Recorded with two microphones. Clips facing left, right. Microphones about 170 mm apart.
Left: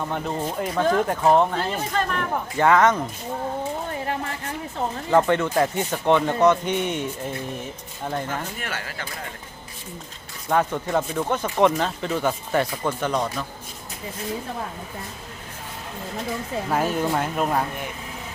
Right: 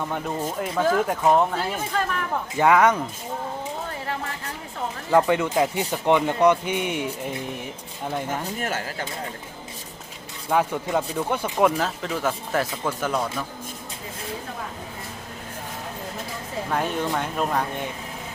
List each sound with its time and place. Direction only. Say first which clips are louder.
0.1 s speech: left 1 dB; centre (ahead or behind)
5.1 s speech: even; 10° right (ahead or behind)
8.6 s speech: right 4 dB; 40° right (ahead or behind)
10.5 s speech: left 1 dB; 10° right (ahead or behind)
16.7 s speech: left 2 dB; 5° left (ahead or behind)